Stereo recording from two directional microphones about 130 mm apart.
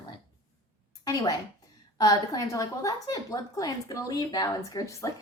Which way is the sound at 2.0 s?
25° left (ahead or behind).